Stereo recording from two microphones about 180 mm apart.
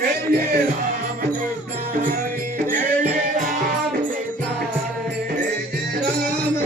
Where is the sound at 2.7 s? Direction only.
45° right (ahead or behind).